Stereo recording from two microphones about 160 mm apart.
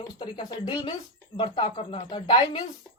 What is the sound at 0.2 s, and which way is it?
Speech, 25° left (ahead or behind).